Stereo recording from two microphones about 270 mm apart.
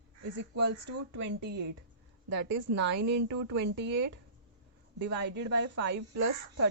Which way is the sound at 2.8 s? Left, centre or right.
Right.